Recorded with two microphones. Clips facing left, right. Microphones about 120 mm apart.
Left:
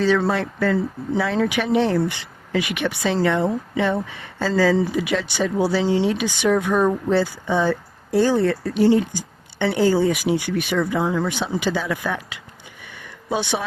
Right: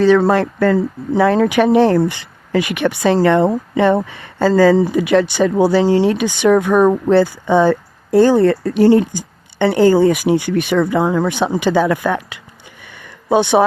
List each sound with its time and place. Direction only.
0.0 s speech: 55° right (ahead or behind)